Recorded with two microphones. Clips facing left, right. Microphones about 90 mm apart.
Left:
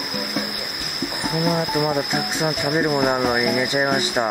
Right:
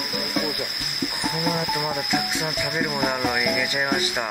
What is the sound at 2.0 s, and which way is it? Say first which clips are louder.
Speech: left 3 dB; 25° left (ahead or behind).